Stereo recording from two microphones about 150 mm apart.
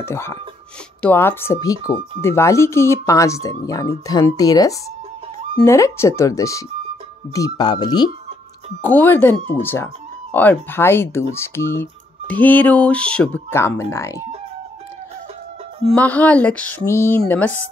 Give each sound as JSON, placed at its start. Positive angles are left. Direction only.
{"t": 0.0, "sound": "music", "side_deg": 15}
{"t": 1.0, "sound": "speech", "side_deg": 15}
{"t": 8.8, "sound": "music", "side_deg": 10}
{"t": 15.8, "sound": "music", "side_deg": 10}